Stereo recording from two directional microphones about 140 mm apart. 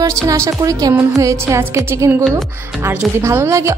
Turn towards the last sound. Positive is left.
turn(degrees=-20)  # may be behind; listen again after turning